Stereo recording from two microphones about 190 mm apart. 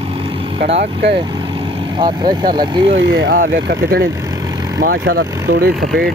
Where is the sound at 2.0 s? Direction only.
25° right (ahead or behind).